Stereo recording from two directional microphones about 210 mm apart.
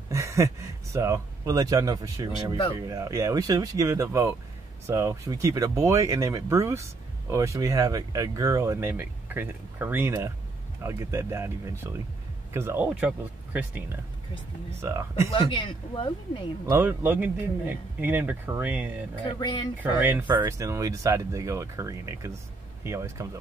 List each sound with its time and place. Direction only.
0.1 s speech: 15° right (ahead or behind)
15.2 s a woman's voice: 25° left (ahead or behind)
16.6 s speech: 10° right (ahead or behind)
19.2 s a woman's voice: 20° left (ahead or behind)
20.0 s speech: 10° right (ahead or behind)